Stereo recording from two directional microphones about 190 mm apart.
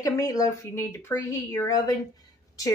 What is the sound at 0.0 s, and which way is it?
Speech, 15° left (ahead or behind).